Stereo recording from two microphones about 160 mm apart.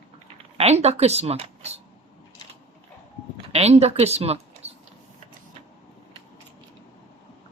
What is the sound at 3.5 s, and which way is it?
Speech, 40° right (ahead or behind).